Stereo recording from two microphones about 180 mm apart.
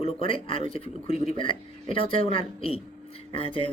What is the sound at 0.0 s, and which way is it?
Speech, 30° left (ahead or behind).